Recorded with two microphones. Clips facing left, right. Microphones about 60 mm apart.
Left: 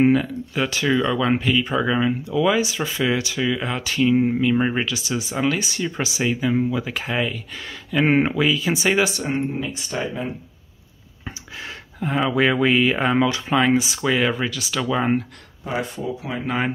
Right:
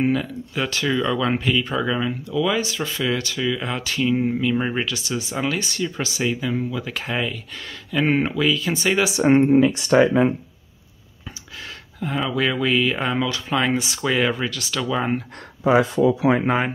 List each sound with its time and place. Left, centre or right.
0.1 s speech: centre
6.9 s speech: centre
8.0 s speech: left
9.5 s speech: right
11.6 s speech: centre
13.6 s speech: centre
15.6 s speech: right